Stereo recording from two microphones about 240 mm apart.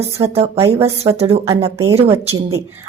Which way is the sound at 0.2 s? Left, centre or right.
Right.